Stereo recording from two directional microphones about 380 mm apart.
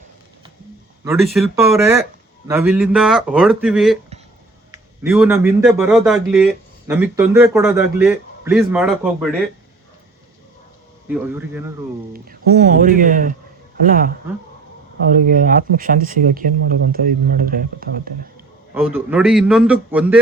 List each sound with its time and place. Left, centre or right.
1.0 s speech: centre
11.1 s speech: centre
12.1 s speech: right
18.7 s speech: centre